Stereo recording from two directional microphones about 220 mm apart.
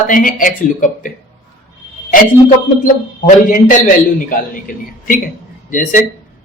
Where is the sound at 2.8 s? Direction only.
35° left (ahead or behind).